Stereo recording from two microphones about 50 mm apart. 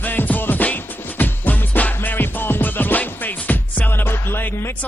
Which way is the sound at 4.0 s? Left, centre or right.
Left.